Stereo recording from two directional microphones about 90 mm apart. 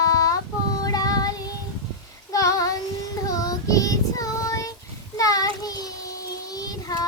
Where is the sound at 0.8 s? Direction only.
45° left (ahead or behind).